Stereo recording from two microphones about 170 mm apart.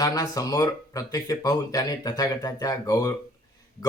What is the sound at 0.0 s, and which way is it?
Speech, 20° left (ahead or behind).